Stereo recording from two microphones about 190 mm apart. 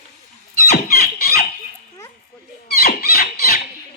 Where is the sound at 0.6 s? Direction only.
55° left (ahead or behind).